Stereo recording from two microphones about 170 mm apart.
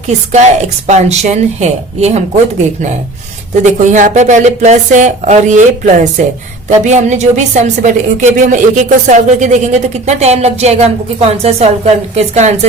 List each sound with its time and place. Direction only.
0.3 s speech: 45° right (ahead or behind)
3.6 s a woman's voice: 45° right (ahead or behind)